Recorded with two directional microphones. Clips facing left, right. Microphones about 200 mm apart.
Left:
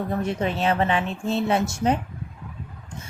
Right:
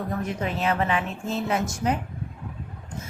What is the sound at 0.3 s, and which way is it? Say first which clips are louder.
A woman's voice: left 3 dB; 30° left (ahead or behind).